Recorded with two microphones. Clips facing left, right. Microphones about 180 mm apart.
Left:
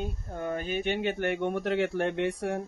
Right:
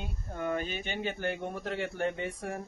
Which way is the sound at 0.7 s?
65° left (ahead or behind).